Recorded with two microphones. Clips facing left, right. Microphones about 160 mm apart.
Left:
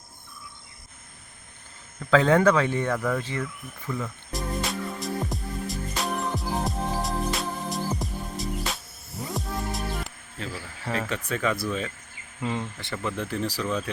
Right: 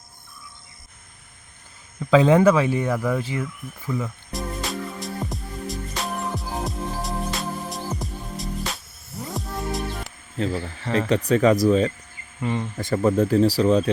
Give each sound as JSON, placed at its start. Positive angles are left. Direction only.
{"t": 2.0, "sound": "cricket", "side_deg": -15}
{"t": 9.3, "sound": "music", "side_deg": 0}
{"t": 11.1, "sound": "speech", "side_deg": -35}
{"t": 12.4, "sound": "speech", "side_deg": 0}
{"t": 12.7, "sound": "speech", "side_deg": -40}